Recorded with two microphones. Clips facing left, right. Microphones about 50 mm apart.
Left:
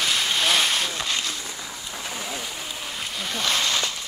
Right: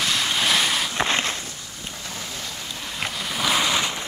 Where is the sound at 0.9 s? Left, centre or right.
Right.